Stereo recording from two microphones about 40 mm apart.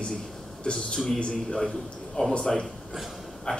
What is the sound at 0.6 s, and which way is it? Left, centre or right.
A man's voice, centre.